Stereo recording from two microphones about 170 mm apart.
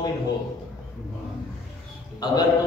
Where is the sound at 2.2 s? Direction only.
25° left (ahead or behind).